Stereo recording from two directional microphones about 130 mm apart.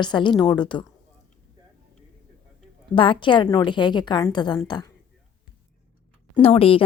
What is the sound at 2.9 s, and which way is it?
Speech, 40° left (ahead or behind).